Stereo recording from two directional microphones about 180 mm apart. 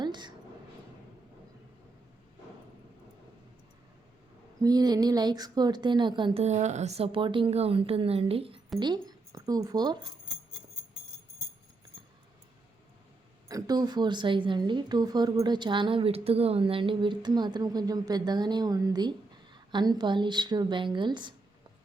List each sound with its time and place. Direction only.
0.0 s a sound: 25° right (ahead or behind)
4.6 s a woman's voice: 20° right (ahead or behind)
13.5 s a woman's voice: 20° right (ahead or behind)